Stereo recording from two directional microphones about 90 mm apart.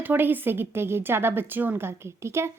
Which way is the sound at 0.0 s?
20° right (ahead or behind).